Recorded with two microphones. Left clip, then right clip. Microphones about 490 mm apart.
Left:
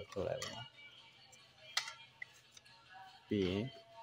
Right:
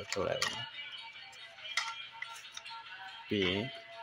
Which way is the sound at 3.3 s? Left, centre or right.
Left.